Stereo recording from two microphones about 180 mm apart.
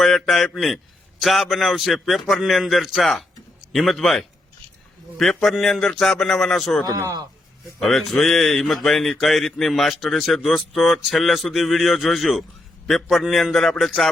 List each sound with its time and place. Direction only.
0.0 s a man's voice: centre (ahead or behind)
6.8 s a man's voice: 20° right (ahead or behind)
7.8 s speech: centre (ahead or behind)